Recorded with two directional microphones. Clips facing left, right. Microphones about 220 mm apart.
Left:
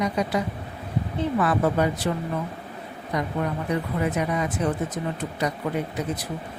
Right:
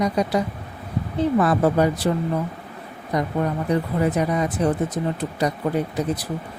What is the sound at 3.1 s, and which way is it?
Speech, 35° right (ahead or behind).